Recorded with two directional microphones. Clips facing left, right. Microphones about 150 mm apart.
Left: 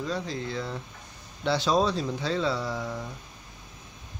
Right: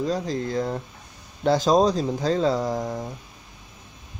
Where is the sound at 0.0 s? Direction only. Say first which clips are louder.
Right 6 dB; 40° right (ahead or behind).